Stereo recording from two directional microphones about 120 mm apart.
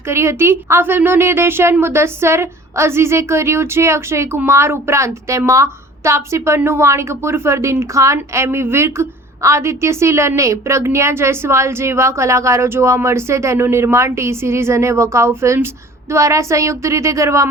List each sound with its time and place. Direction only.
0.1 s a woman's voice: 20° right (ahead or behind)